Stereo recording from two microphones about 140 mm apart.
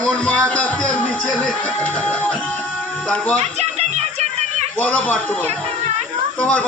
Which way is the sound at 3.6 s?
50° right (ahead or behind).